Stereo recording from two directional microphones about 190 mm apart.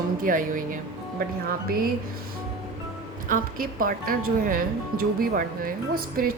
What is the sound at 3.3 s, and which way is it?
A woman's voice, 45° right (ahead or behind).